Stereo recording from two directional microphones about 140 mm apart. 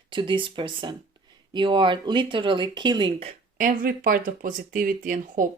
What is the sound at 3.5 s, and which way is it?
Speech, 75° right (ahead or behind).